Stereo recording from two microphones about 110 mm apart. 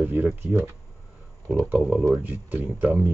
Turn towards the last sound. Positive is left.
turn(degrees=-15)  # may be behind; listen again after turning